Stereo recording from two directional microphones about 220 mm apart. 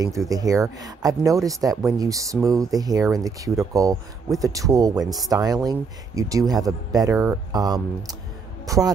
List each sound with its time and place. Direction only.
0.0 s speech: 15° right (ahead or behind)